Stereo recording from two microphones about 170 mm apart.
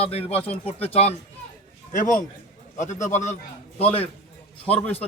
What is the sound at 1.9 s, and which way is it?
A man's voice, 50° left (ahead or behind).